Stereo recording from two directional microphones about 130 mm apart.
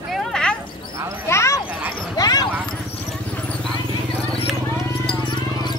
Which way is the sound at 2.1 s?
30° left (ahead or behind).